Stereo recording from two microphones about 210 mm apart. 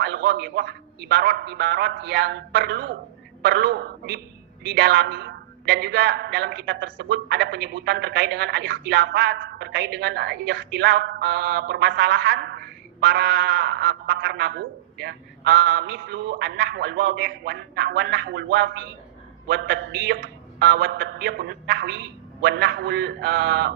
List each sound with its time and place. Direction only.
0.0 s a man's voice: 50° right (ahead or behind)